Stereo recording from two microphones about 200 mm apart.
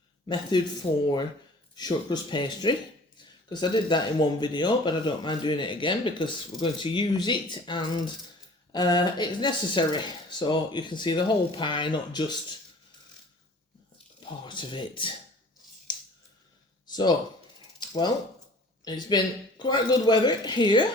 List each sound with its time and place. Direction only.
0.5 s speech: 20° left (ahead or behind)
1.7 s speech: 20° left (ahead or behind)
14.2 s speech: 25° left (ahead or behind)
16.8 s a sound: 20° left (ahead or behind)
18.9 s speech: 20° left (ahead or behind)